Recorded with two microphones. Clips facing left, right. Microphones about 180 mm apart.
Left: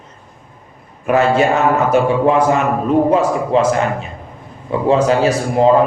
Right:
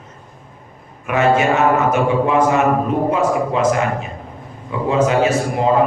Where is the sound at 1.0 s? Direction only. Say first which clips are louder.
Left 2 dB; 35° left (ahead or behind).